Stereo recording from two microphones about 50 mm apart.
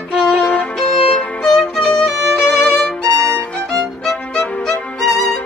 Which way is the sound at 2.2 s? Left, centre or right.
Centre.